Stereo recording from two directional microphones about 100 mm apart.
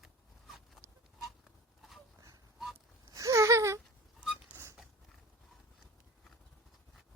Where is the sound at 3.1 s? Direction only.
30° right (ahead or behind).